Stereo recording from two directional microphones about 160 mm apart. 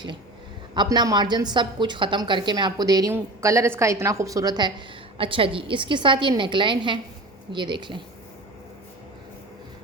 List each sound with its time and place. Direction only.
0.7 s a woman's voice: 25° right (ahead or behind)